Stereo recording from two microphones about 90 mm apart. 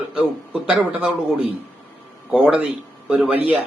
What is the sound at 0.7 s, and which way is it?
Speech, 15° right (ahead or behind).